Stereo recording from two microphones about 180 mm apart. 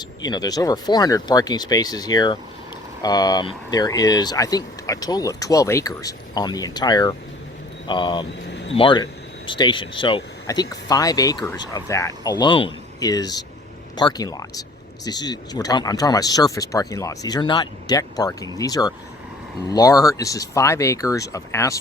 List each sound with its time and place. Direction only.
0.3 s speech: 20° left (ahead or behind)
8.4 s a sound: 80° left
8.7 s speech: 25° left (ahead or behind)